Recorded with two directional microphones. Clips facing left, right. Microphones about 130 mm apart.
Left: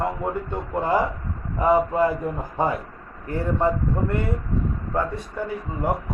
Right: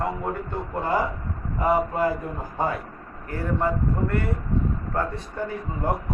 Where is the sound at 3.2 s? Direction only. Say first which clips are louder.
Left 3 dB; 25° left (ahead or behind).